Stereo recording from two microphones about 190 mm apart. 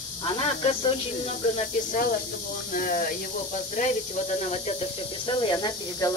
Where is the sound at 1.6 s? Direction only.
40° left (ahead or behind).